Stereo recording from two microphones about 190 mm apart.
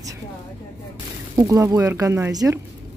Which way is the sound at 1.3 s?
15° right (ahead or behind).